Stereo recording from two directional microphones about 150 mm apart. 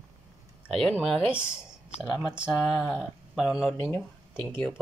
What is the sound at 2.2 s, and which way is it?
Speech, 15° left (ahead or behind).